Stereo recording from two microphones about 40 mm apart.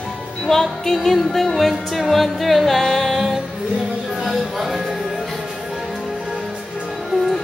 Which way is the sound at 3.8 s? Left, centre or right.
Centre.